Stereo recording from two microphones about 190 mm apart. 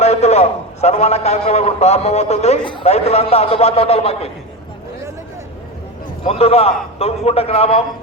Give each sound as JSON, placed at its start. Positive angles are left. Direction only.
{"t": 0.0, "sound": "a man's voice", "side_deg": 35}
{"t": 6.2, "sound": "a man's voice", "side_deg": 30}